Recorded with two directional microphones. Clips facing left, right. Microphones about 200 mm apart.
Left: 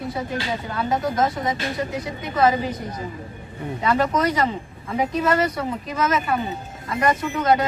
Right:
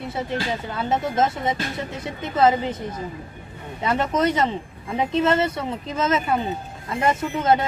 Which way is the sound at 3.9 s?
25° right (ahead or behind).